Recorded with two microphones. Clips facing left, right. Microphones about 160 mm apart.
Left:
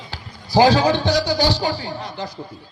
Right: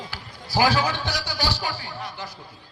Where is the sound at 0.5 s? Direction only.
20° left (ahead or behind).